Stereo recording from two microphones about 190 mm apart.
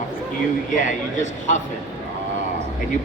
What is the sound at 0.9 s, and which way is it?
Speech, 40° left (ahead or behind).